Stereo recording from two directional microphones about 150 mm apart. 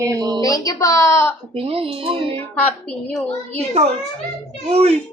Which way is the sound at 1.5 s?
40° right (ahead or behind).